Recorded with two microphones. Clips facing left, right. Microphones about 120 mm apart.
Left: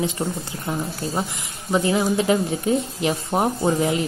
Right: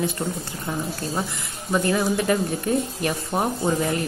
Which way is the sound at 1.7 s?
20° left (ahead or behind).